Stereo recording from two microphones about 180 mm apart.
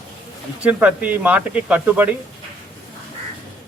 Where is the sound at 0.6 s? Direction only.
10° right (ahead or behind).